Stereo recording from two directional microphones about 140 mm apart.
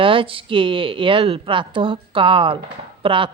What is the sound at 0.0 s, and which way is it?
Speech, 40° right (ahead or behind).